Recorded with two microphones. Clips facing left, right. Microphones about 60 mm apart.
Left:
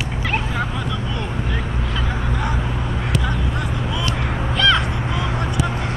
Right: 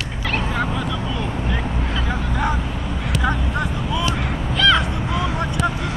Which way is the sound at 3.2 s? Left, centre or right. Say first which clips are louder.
Right 3 dB; centre.